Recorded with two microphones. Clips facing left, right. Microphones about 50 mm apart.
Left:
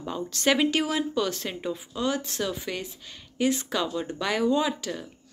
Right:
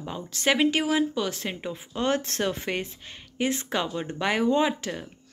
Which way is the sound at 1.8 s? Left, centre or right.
Right.